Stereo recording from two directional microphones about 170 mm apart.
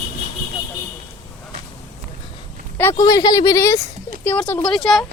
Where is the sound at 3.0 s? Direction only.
25° left (ahead or behind); by 5.0 s centre (ahead or behind).